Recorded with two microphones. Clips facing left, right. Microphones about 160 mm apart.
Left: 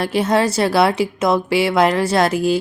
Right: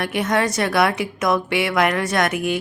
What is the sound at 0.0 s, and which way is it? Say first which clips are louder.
A woman's voice: left 4 dB; 30° left (ahead or behind).